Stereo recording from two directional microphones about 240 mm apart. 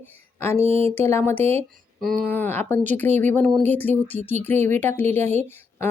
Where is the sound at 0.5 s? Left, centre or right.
Right.